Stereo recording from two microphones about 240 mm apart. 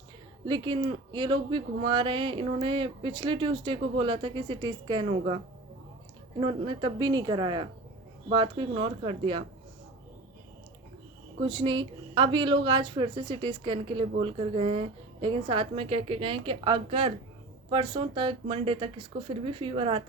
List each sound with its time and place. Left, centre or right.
0.4 s speech: centre
6.4 s speech: centre
11.3 s speech: right